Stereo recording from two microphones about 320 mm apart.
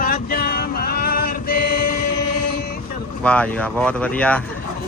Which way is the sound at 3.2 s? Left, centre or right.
Centre.